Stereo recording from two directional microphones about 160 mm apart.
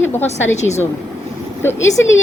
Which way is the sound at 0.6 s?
45° left (ahead or behind).